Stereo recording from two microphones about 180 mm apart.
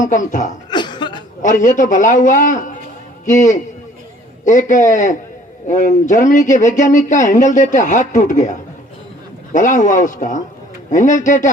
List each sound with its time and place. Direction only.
0.0 s speech: 45° left (ahead or behind)
0.7 s cough: 25° left (ahead or behind)
1.4 s speech: 45° left (ahead or behind)